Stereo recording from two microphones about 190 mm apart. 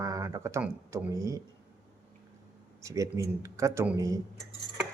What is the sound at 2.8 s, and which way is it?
Speech, 15° right (ahead or behind).